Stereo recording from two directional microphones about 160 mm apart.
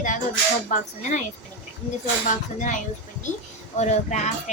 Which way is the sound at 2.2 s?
55° left (ahead or behind).